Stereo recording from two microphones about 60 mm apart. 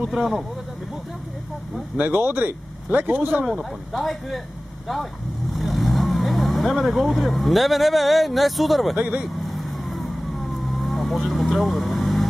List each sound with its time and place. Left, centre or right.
0.0 s speech: centre
2.0 s speech: right
3.9 s speech: centre
5.5 s speech: centre
8.9 s speech: right
9.4 s vehicle: centre